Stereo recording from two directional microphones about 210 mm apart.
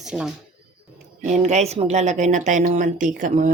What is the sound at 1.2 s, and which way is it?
Speech, 35° right (ahead or behind).